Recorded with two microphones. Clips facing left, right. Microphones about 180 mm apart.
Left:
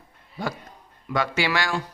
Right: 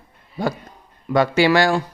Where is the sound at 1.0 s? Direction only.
35° right (ahead or behind).